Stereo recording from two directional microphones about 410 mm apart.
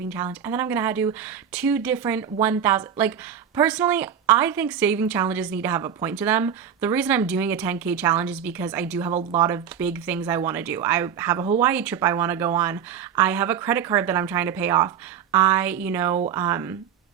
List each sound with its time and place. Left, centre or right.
0.1 s speech: centre
16.1 s speech: centre